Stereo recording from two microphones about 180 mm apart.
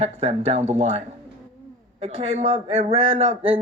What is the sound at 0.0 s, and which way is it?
Speech, 35° right (ahead or behind).